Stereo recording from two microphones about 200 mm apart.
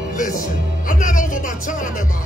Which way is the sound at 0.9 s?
40° left (ahead or behind).